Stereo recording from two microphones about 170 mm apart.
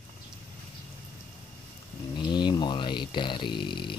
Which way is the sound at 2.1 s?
25° left (ahead or behind).